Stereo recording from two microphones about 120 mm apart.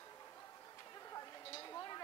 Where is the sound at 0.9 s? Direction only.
30° left (ahead or behind).